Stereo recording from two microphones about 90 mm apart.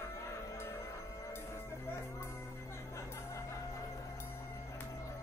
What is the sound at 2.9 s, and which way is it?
Music, 35° left (ahead or behind).